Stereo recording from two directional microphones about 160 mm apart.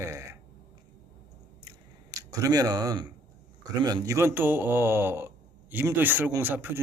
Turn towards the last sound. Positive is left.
turn(degrees=-10)  # may be behind; listen again after turning